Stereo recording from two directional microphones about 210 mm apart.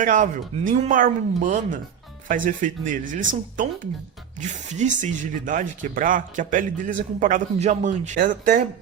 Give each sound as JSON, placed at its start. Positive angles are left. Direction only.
{"t": 0.0, "sound": "speech", "side_deg": -35}